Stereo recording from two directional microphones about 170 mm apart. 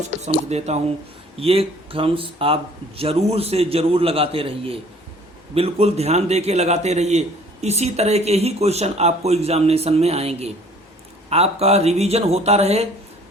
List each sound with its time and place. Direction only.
0.5 s a man's voice: 40° right (ahead or behind)